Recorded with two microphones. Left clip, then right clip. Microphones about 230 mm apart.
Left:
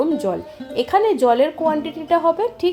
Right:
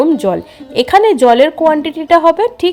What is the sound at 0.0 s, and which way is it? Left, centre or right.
A woman's voice, right.